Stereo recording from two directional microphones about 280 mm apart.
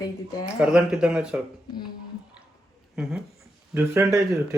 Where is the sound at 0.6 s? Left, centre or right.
Centre.